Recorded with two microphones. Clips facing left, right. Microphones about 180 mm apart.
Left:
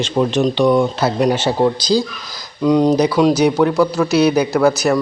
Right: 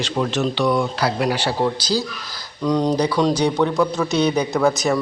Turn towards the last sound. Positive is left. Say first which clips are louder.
# left 4 dB
turn(degrees=5)  # may be behind; listen again after turning